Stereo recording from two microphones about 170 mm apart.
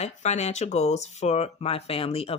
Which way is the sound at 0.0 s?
40° left (ahead or behind).